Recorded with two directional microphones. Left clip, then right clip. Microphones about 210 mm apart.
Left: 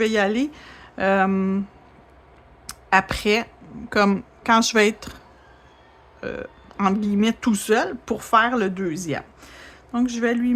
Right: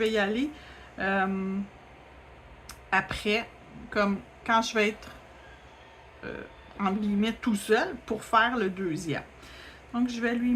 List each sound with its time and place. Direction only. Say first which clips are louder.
0.0 s speech: left 6 dB; 45° left (ahead or behind)
2.6 s a sound: left 8 dB; 45° left (ahead or behind)
3.8 s speech: left 8 dB; 45° left (ahead or behind)
6.2 s speech: left 9 dB; 45° left (ahead or behind)